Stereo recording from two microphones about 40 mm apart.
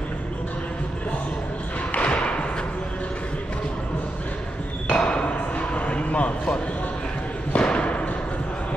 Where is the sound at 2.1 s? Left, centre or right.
Left.